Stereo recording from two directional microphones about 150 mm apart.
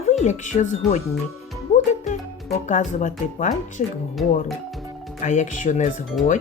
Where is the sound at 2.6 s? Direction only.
55° left (ahead or behind).